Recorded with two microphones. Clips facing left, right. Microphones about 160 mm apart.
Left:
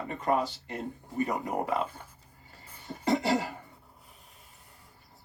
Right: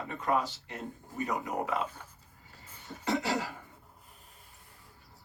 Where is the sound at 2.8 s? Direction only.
50° left (ahead or behind).